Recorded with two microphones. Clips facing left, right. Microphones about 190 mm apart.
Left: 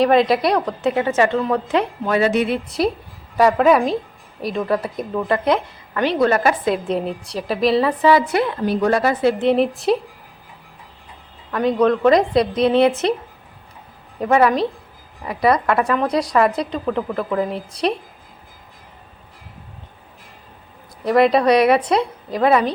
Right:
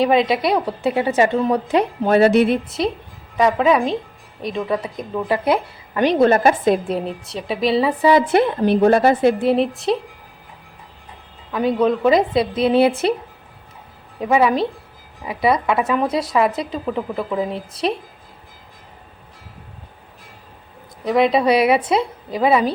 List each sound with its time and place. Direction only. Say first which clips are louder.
0.0 s a woman's voice: left 1 dB; centre (ahead or behind)
2.1 s speech: right 4 dB; 60° right (ahead or behind)
3.3 s a woman's voice: left 2 dB; centre (ahead or behind); by 6.7 s 25° right (ahead or behind)
6.8 s a woman's voice: left 1 dB; centre (ahead or behind)
8.4 s a woman's voice: right 4 dB; 25° right (ahead or behind)
9.4 s a woman's voice: left 1 dB; centre (ahead or behind)
11.5 s a woman's voice: left 1 dB; 5° right (ahead or behind)
14.2 s a woman's voice: left 1 dB; 5° right (ahead or behind)
21.0 s a woman's voice: left 1 dB; centre (ahead or behind)